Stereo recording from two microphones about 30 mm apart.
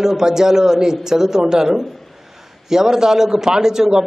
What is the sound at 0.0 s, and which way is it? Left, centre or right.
A man's voice, centre.